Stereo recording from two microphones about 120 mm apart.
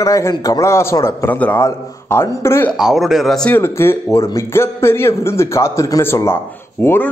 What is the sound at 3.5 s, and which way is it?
A man's voice, 20° left (ahead or behind).